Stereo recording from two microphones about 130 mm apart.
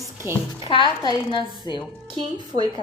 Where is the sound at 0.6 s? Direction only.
40° left (ahead or behind).